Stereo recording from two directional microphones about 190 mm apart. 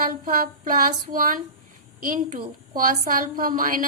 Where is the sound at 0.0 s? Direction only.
45° right (ahead or behind).